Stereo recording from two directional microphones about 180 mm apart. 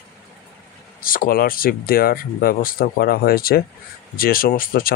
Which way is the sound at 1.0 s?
50° left (ahead or behind).